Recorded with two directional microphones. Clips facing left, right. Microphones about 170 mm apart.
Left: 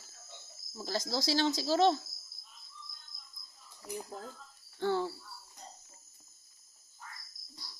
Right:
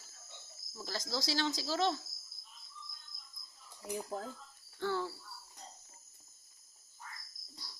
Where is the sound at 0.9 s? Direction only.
25° left (ahead or behind).